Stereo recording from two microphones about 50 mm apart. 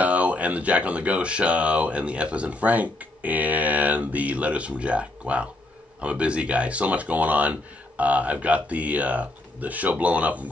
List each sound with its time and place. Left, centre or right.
0.0 s speech: right